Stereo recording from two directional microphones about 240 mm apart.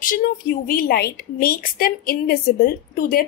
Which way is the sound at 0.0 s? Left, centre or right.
Left.